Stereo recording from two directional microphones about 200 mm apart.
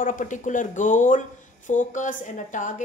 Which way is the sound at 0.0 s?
40° left (ahead or behind).